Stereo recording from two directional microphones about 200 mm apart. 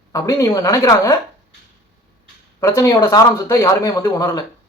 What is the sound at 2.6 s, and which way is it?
A man's voice, 15° left (ahead or behind).